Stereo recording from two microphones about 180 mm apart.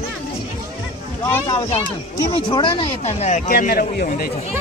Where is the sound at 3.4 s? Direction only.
55° left (ahead or behind).